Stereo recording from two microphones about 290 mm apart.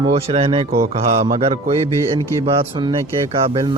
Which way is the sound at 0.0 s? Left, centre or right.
Right.